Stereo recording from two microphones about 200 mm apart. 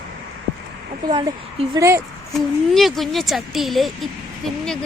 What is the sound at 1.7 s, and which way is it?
Speech, 15° right (ahead or behind).